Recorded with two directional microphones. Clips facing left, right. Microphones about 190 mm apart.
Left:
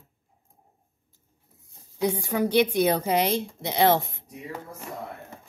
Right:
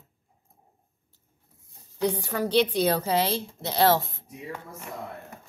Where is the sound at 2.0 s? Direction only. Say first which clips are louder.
Left 2 dB; 10° left (ahead or behind).